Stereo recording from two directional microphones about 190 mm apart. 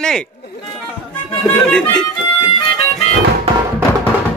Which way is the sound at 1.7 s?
5° left (ahead or behind).